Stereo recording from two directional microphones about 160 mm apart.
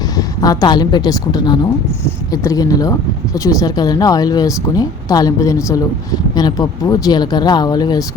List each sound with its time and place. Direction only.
0.2 s a woman's voice: 20° left (ahead or behind)